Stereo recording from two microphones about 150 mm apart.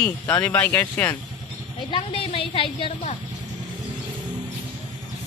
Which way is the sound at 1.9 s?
35° left (ahead or behind).